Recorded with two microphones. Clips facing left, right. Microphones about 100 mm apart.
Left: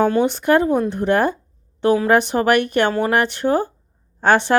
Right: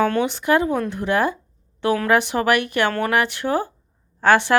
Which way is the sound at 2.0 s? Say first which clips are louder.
Left 2 dB; 40° left (ahead or behind).